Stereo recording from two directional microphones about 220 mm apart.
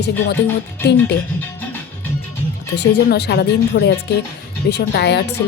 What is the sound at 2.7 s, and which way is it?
Speech, 50° left (ahead or behind).